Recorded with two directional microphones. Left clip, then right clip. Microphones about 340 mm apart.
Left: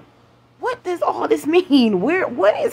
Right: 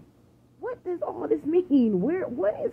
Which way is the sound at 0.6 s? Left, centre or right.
Centre.